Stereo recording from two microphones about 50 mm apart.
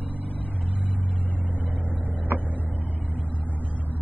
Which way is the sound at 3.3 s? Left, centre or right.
Left.